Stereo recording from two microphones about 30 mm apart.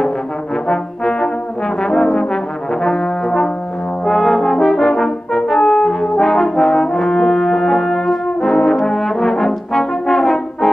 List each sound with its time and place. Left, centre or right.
0.7 s trombone: centre
1.8 s brass instrument: centre
4.0 s brass instrument: centre